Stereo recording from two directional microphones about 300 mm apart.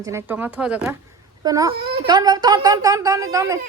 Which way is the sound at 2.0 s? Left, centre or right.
Centre.